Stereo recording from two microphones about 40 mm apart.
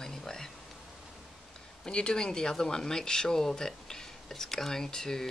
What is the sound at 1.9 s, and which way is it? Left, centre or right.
Speech, left.